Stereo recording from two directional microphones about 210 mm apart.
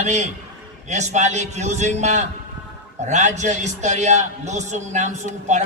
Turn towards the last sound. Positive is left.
turn(degrees=-35)  # may be behind; listen again after turning